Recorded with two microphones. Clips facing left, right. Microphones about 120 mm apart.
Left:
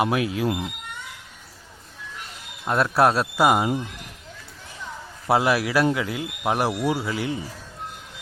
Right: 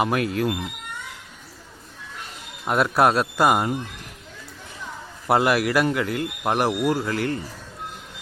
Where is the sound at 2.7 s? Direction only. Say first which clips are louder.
Even; centre (ahead or behind).